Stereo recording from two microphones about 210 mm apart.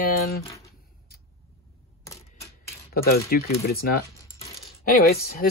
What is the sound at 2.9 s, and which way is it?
Speech, 45° left (ahead or behind).